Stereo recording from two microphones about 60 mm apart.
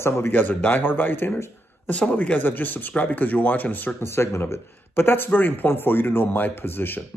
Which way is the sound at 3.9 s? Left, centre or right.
Left.